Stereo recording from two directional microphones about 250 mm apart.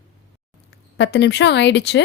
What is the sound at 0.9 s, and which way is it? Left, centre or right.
Speech, left.